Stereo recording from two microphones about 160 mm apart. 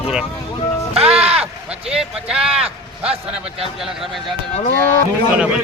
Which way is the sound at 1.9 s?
5° right (ahead or behind).